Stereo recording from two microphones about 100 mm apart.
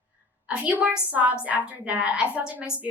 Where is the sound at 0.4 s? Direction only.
15° right (ahead or behind).